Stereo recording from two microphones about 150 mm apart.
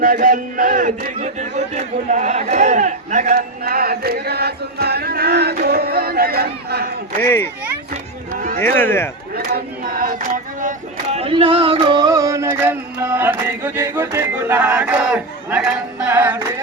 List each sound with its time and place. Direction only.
0.0 s a man's voice: 70° right (ahead or behind)
3.3 s chant: 90° right
7.2 s speech: 15° left (ahead or behind)
8.3 s run: 60° right (ahead or behind)
8.6 s speech: 15° left (ahead or behind)
9.6 s a sound: 70° right (ahead or behind)
11.2 s a sound: 40° right (ahead or behind); by 16.4 s 10° right (ahead or behind)